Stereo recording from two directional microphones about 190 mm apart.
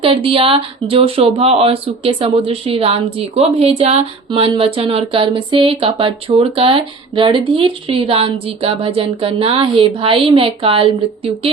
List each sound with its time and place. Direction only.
0.0 s speech: 30° right (ahead or behind)